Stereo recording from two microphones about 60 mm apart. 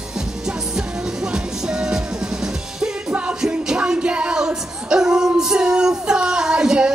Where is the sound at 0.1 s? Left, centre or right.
Centre.